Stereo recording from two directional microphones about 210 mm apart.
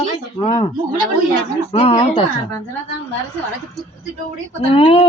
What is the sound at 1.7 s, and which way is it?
Speech, 30° left (ahead or behind).